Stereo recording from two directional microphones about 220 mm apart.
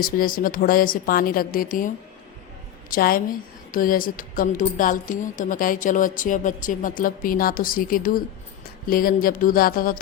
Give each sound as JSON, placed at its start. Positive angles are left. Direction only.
{"t": 0.0, "sound": "a woman's voice", "side_deg": 40}
{"t": 2.9, "sound": "a woman's voice", "side_deg": 40}